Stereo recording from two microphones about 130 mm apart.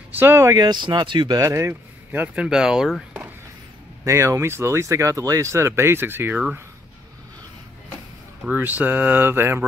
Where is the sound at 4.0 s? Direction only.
25° right (ahead or behind).